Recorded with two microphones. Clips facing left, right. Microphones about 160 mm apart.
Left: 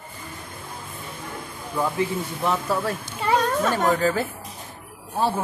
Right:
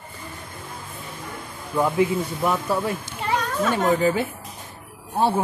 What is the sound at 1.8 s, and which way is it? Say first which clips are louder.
Speech: right 4 dB; 10° right (ahead or behind).